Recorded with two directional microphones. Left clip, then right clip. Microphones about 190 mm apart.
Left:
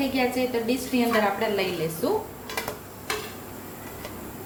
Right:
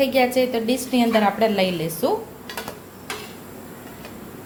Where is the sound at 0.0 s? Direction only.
50° right (ahead or behind).